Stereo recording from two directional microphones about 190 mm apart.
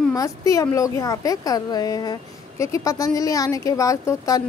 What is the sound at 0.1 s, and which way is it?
Speech, 20° left (ahead or behind).